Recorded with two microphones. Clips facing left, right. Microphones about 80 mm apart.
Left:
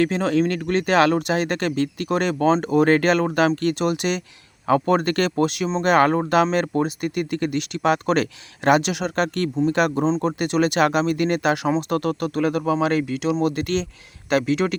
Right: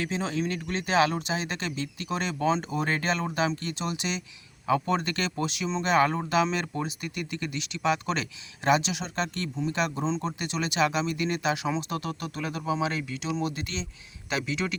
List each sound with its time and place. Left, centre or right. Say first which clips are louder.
0.0 s speech: left 10 dB; left